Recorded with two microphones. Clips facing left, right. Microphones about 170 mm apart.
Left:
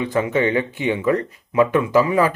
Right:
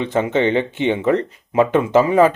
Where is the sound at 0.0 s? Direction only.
25° right (ahead or behind).